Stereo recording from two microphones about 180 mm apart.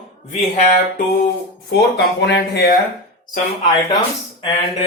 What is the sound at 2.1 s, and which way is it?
Speech, 70° left (ahead or behind).